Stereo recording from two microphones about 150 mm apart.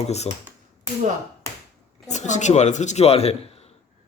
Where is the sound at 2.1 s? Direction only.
50° left (ahead or behind).